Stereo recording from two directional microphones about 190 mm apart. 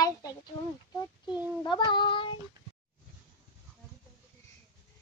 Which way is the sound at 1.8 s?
25° left (ahead or behind).